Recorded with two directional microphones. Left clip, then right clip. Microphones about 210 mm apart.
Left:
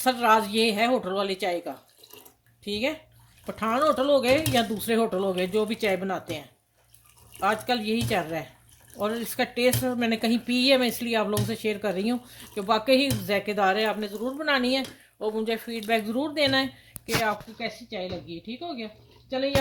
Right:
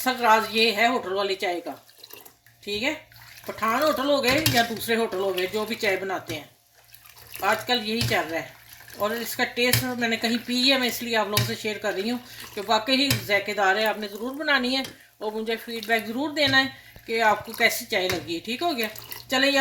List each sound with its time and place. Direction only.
0.0 s speech: 55° left (ahead or behind)
7.4 s speech: 55° left (ahead or behind)
17.6 s speech: 45° left (ahead or behind)